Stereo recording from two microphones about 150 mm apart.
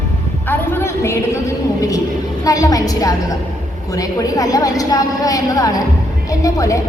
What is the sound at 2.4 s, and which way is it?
A woman's voice, 25° left (ahead or behind).